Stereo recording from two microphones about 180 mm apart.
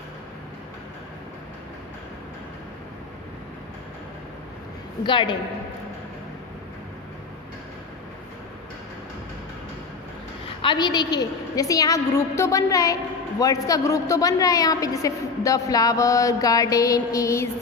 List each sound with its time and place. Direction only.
5.0 s a woman's voice: 25° left (ahead or behind)
10.6 s a woman's voice: 25° left (ahead or behind)